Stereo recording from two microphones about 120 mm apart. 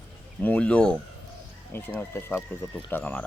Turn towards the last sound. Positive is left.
turn(degrees=15)  # may be behind; listen again after turning